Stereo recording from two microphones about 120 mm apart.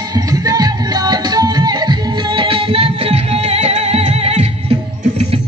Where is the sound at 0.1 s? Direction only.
30° right (ahead or behind).